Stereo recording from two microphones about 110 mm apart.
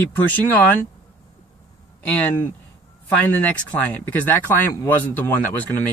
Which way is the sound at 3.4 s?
15° left (ahead or behind).